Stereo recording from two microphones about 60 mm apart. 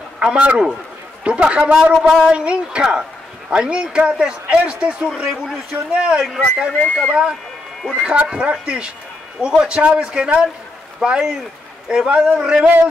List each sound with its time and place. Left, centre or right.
0.2 s a man's voice: centre
6.2 s speech: centre
7.1 s a man's voice: centre